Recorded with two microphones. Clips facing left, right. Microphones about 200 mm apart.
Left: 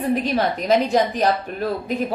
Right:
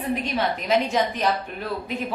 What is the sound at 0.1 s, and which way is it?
A woman's voice, 40° left (ahead or behind).